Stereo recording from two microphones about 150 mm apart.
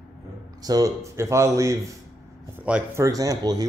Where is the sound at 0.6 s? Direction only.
25° right (ahead or behind).